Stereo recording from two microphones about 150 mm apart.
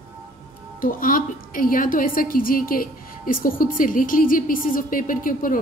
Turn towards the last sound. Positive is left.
turn(degrees=65)  # may be behind; listen again after turning